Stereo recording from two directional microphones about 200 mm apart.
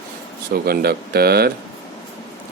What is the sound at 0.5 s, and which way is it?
Speech, 50° right (ahead or behind).